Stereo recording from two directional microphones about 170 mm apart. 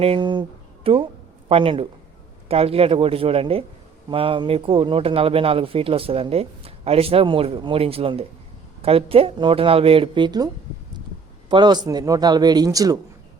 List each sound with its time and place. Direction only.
0.0 s a man's voice: 30° right (ahead or behind)